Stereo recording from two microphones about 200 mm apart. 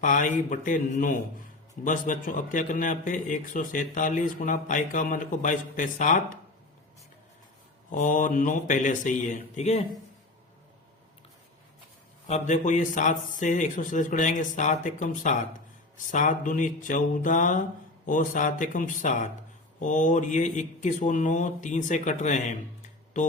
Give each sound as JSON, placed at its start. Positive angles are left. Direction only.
{"t": 0.0, "sound": "a man's voice", "side_deg": 40}
{"t": 7.9, "sound": "a man's voice", "side_deg": 40}
{"t": 12.3, "sound": "a man's voice", "side_deg": 35}